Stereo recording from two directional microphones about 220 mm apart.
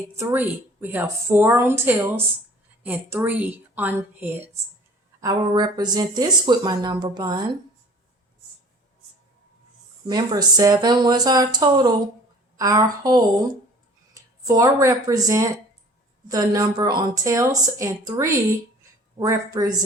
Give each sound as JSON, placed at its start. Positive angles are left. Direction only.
{"t": 0.2, "sound": "speech", "side_deg": -10}
{"t": 10.1, "sound": "speech", "side_deg": -20}
{"t": 14.4, "sound": "speech", "side_deg": -15}